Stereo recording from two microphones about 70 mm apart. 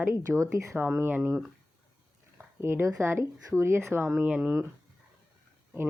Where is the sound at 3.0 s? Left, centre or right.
Right.